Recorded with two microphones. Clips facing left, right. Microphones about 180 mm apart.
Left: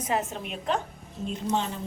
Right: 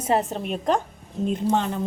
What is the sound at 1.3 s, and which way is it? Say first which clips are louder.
Speech: right 5 dB; 55° right (ahead or behind).